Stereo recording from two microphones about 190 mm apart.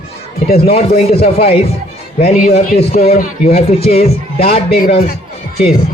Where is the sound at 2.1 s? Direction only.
40° left (ahead or behind).